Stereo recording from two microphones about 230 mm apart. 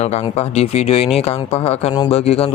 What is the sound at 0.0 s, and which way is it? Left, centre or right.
Speech, left.